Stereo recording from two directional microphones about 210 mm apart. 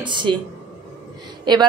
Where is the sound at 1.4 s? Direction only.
20° right (ahead or behind).